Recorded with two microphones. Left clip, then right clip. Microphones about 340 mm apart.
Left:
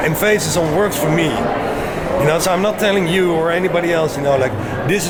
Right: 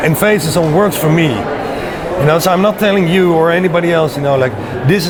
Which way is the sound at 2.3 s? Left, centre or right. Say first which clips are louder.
Right 7 dB; right.